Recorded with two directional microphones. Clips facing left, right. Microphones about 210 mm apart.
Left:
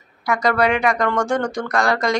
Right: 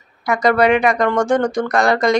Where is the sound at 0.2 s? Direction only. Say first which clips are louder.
Right 4 dB; 20° right (ahead or behind).